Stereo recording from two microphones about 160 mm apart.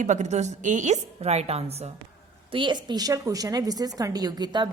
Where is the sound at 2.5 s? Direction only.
30° right (ahead or behind).